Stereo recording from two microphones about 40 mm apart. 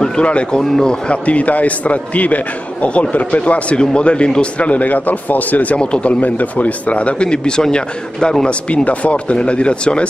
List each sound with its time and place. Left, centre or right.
0.0 s speech: left
0.6 s speech: centre
1.0 s a man's voice: left
5.8 s a man's voice: left
6.2 s a man's voice: left; by 8.5 s centre
8.6 s a man's voice: left